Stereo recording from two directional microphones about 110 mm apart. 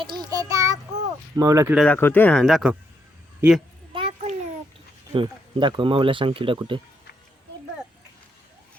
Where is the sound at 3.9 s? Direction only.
65° right (ahead or behind).